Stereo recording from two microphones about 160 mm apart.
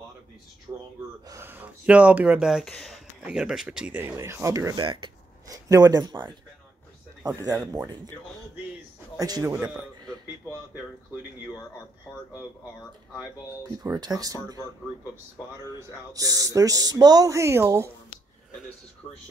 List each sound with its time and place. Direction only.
0.7 s speech: 20° right (ahead or behind)
4.1 s speech: 20° right (ahead or behind)
9.2 s speech: 20° right (ahead or behind)
13.8 s speech: 25° right (ahead or behind)
15.6 s speech: 20° right (ahead or behind)
19.0 s speech: 35° left (ahead or behind)